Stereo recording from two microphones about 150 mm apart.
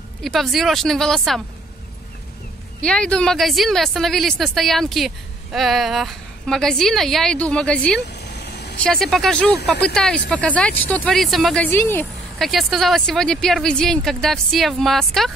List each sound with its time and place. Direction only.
0.2 s a woman's voice: centre (ahead or behind)
2.8 s a woman's voice: 5° left (ahead or behind)
8.1 s vehicle: 90° left
8.8 s a woman's voice: 5° left (ahead or behind)
12.4 s a woman's voice: centre (ahead or behind)